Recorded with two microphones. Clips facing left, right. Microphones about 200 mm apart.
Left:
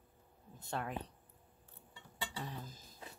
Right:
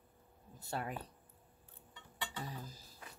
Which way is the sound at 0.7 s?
5° right (ahead or behind).